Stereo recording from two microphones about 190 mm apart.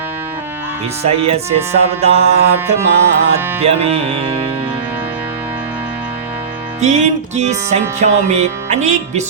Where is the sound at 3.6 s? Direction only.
35° right (ahead or behind).